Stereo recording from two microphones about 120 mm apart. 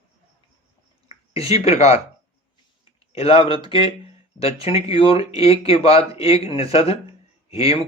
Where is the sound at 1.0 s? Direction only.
55° left (ahead or behind).